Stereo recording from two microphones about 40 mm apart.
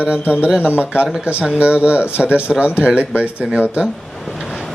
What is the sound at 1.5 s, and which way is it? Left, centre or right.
Speech, right.